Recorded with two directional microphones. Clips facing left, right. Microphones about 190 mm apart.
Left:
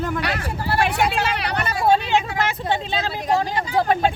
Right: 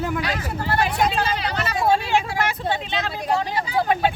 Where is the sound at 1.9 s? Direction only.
20° left (ahead or behind).